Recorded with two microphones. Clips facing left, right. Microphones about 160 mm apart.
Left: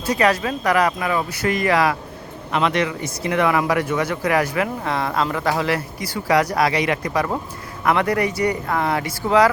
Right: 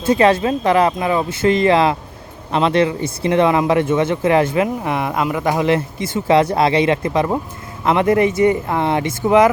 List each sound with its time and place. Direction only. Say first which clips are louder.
0.0 s speech: right 5 dB; 25° right (ahead or behind)